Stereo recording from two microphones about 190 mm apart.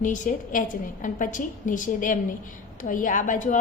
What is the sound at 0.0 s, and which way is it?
A woman's voice, 40° left (ahead or behind).